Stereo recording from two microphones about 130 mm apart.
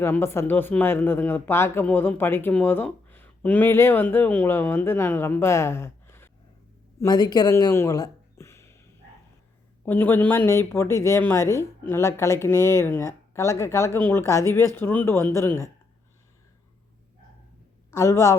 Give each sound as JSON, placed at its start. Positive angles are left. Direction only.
{"t": 0.0, "sound": "speech", "side_deg": 20}
{"t": 7.0, "sound": "a sound", "side_deg": 30}
{"t": 9.8, "sound": "a woman's voice", "side_deg": 15}
{"t": 17.9, "sound": "a woman's voice", "side_deg": 25}